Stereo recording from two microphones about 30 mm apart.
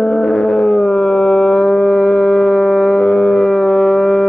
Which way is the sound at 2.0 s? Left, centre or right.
Left.